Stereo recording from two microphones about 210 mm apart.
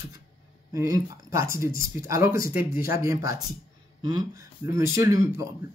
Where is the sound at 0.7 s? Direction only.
15° right (ahead or behind).